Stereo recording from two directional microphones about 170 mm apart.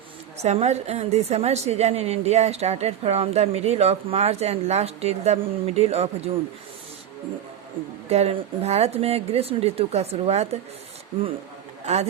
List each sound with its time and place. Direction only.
0.4 s a woman's voice: 40° right (ahead or behind)
8.1 s a woman's voice: 40° right (ahead or behind)